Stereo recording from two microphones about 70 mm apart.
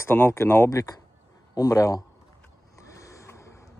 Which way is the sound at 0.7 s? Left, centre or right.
Left.